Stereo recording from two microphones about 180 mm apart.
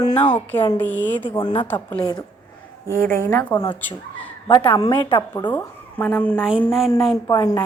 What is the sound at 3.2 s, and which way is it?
Speech, 15° left (ahead or behind).